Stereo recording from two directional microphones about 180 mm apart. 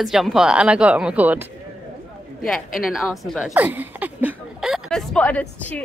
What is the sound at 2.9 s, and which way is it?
A woman's voice, centre (ahead or behind).